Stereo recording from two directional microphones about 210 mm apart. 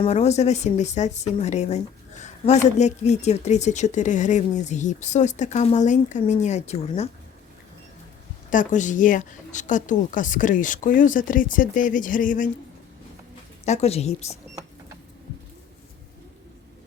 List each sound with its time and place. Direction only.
0.0 s a woman's voice: 30° left (ahead or behind)
8.4 s a woman's voice: 35° left (ahead or behind)
13.7 s a woman's voice: 30° left (ahead or behind)